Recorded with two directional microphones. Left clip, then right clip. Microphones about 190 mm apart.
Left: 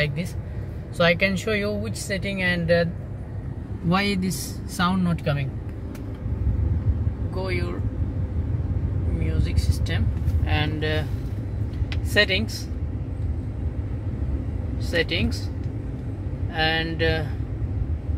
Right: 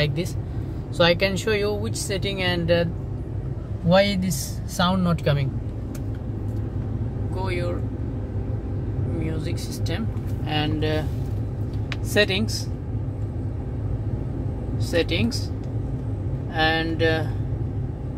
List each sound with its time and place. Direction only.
0.0 s speech: 15° right (ahead or behind)
3.9 s speech: 20° right (ahead or behind)
9.2 s speech: centre (ahead or behind)
12.1 s speech: centre (ahead or behind)
14.9 s speech: centre (ahead or behind)
16.5 s speech: centre (ahead or behind)